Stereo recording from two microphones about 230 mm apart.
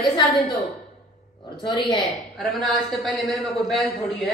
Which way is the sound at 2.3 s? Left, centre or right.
Centre.